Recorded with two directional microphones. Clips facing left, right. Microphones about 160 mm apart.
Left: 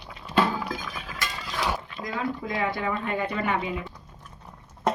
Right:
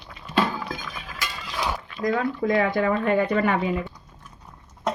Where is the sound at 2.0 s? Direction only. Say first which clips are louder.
Right 8 dB; 50° right (ahead or behind).